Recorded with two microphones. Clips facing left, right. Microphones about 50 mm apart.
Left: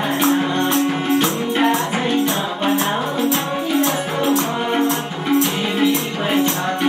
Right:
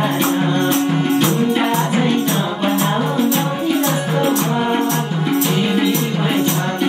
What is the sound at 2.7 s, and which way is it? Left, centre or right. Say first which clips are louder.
Music: right 2 dB; centre.